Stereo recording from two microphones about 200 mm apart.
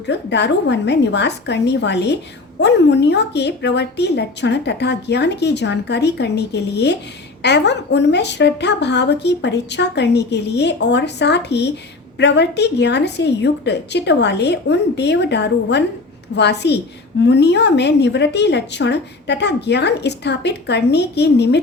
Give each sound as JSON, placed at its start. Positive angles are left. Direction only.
{"t": 0.0, "sound": "speech", "side_deg": 60}